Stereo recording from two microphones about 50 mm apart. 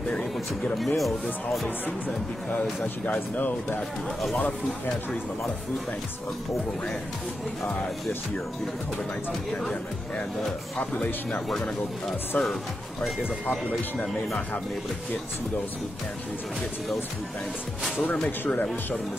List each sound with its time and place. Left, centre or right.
0.7 s speech: centre
1.9 s speech: left
3.2 s speech: left
4.4 s speech: left
12.3 s speech: left
13.7 s a man's voice: centre
18.4 s speech: left